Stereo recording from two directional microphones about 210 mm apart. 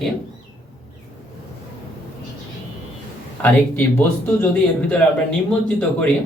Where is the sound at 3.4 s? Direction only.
10° left (ahead or behind).